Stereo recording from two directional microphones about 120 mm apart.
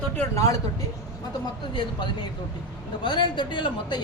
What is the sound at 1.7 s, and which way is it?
A woman's voice, 40° left (ahead or behind).